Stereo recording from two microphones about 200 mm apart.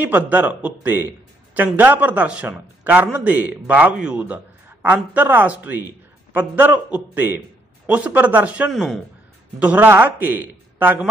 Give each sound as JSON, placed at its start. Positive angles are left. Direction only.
{"t": 0.0, "sound": "a man's voice", "side_deg": -10}